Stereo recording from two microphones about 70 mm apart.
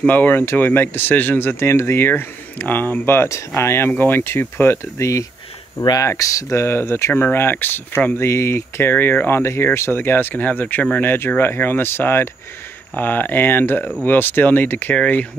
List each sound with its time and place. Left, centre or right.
0.0 s speech: left
4.9 s speech: left
6.6 s speech: left
8.9 s speech: left
9.4 s speech: left